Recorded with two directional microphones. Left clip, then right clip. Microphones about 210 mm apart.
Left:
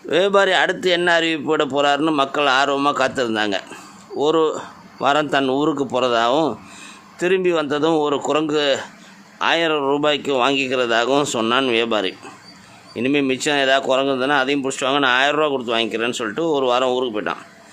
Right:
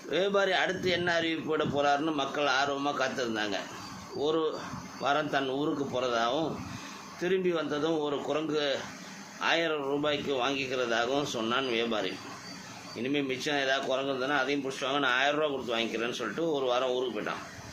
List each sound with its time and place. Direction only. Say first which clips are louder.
0.1 s speech: left 12 dB; 55° left (ahead or behind)